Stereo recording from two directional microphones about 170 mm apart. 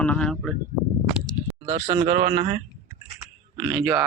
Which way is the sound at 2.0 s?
40° right (ahead or behind).